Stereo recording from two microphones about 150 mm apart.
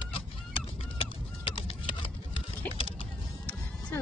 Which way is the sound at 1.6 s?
40° left (ahead or behind).